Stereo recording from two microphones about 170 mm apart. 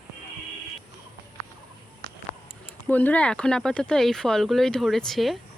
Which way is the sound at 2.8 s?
10° left (ahead or behind).